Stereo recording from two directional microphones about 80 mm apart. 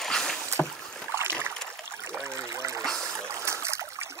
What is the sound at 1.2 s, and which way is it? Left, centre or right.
Boat, right.